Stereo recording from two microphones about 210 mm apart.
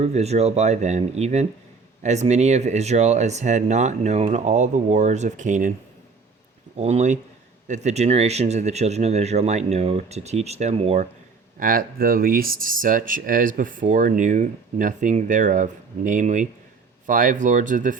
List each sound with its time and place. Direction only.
0.0 s speech: 30° right (ahead or behind)
6.7 s speech: 30° right (ahead or behind)
11.6 s speech: 45° right (ahead or behind)